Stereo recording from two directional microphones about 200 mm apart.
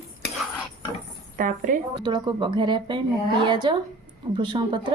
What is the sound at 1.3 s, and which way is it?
Speech, 40° right (ahead or behind).